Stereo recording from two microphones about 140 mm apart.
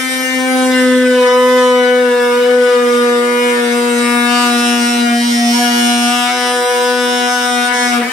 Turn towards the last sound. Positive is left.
turn(degrees=0)  # may be behind; listen again after turning